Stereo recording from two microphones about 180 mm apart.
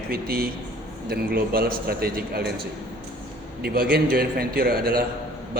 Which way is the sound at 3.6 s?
60° right (ahead or behind).